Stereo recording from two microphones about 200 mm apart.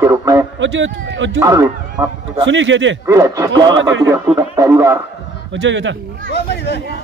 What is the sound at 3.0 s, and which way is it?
Speech, 15° right (ahead or behind).